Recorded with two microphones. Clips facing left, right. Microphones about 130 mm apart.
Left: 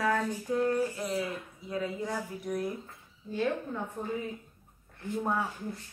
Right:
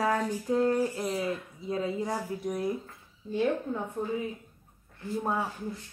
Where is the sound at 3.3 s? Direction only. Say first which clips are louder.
Right 3 dB; 20° right (ahead or behind).